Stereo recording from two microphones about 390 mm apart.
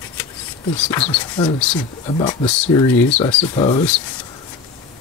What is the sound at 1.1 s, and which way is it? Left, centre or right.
Speech, centre.